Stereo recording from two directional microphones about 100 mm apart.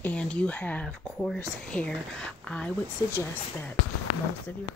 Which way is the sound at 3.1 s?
25° left (ahead or behind).